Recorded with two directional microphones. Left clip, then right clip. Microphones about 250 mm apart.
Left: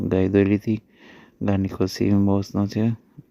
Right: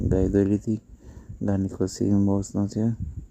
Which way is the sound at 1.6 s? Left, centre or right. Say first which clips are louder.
Left 3 dB; centre.